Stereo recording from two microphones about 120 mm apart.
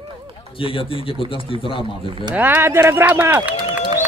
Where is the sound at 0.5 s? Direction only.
45° left (ahead or behind).